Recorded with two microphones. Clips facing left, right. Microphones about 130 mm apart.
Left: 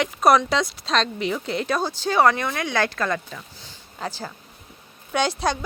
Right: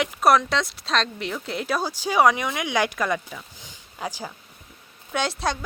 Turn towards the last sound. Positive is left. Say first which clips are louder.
# left 3 dB
turn(degrees=0)  # may be behind; listen again after turning